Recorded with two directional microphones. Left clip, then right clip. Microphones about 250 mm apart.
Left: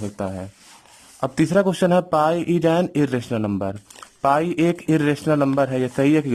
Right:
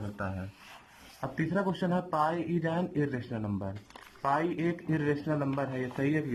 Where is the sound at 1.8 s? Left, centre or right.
Left.